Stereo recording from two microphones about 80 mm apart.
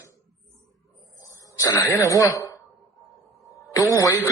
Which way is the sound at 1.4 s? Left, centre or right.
Left.